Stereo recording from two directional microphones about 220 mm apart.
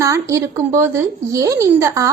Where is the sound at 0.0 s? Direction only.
15° right (ahead or behind).